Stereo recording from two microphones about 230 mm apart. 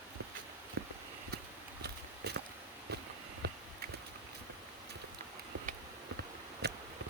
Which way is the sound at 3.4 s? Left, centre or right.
Right.